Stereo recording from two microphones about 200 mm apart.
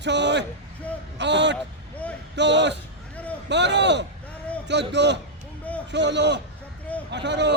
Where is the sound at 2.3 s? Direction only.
60° right (ahead or behind).